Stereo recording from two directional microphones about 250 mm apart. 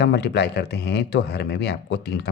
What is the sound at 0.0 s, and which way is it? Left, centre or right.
A man's voice, left.